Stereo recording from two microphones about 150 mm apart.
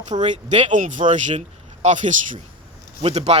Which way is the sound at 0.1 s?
50° right (ahead or behind).